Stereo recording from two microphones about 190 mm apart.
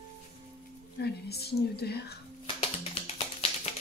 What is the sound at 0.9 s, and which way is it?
A woman's voice, 55° left (ahead or behind).